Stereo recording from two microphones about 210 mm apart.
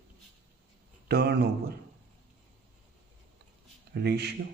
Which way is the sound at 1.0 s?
50° right (ahead or behind).